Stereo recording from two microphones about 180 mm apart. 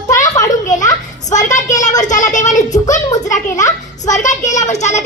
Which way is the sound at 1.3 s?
45° left (ahead or behind).